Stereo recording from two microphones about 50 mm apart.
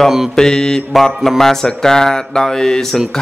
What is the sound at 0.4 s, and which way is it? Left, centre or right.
Speech, centre.